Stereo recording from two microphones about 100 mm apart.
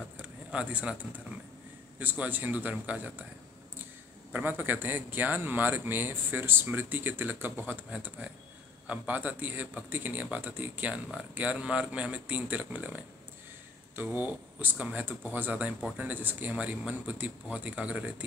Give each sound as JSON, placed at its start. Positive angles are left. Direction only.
{"t": 0.2, "sound": "a sound", "side_deg": -15}
{"t": 2.0, "sound": "a man's voice", "side_deg": -15}
{"t": 4.3, "sound": "a man's voice", "side_deg": -20}